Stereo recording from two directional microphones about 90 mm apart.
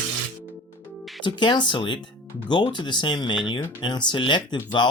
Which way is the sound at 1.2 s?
60° left (ahead or behind).